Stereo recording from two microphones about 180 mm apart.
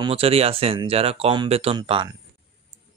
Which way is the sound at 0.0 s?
35° right (ahead or behind).